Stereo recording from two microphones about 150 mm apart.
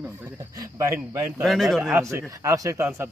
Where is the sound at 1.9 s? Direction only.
15° right (ahead or behind).